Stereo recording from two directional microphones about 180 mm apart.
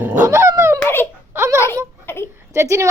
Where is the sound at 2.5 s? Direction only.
15° right (ahead or behind).